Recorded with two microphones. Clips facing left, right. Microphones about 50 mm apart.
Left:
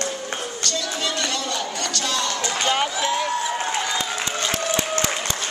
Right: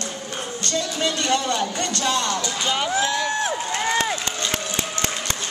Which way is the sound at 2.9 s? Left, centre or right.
Right.